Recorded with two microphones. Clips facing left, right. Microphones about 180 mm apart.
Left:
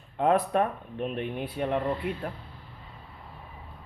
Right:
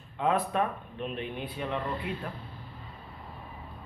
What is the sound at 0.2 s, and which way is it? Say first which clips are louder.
Speech: left 4 dB; 40° left (ahead or behind).